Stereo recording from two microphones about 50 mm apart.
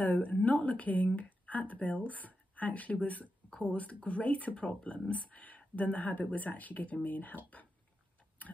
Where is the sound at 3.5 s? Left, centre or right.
Centre.